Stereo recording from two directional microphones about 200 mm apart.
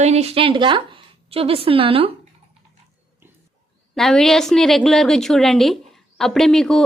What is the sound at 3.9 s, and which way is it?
A woman's voice, centre (ahead or behind).